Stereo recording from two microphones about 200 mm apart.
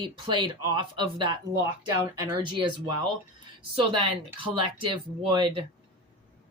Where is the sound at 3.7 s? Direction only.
25° right (ahead or behind).